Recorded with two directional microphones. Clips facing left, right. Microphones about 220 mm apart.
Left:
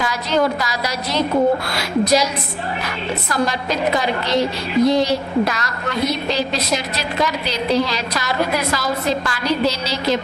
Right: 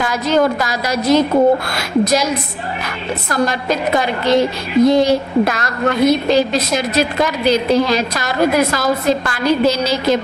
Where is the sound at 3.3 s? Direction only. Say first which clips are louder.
Right 4 dB; 50° right (ahead or behind).